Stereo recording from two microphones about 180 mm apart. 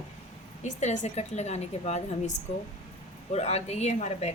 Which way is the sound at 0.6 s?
40° left (ahead or behind).